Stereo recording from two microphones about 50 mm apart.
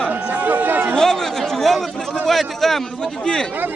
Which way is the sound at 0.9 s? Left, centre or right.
Centre.